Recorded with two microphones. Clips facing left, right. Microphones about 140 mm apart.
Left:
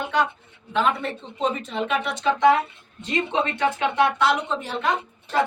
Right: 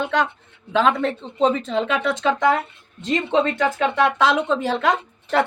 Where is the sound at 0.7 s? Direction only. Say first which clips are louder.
Right 4 dB; 90° right.